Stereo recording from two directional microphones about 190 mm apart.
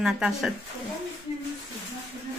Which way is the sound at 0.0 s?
Centre (ahead or behind).